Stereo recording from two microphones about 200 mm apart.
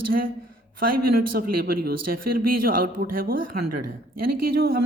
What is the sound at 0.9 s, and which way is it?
Speech, 45° right (ahead or behind).